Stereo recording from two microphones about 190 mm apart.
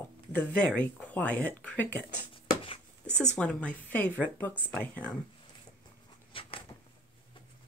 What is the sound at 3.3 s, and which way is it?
Speech, 5° left (ahead or behind).